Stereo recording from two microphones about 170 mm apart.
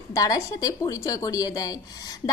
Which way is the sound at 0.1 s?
20° left (ahead or behind).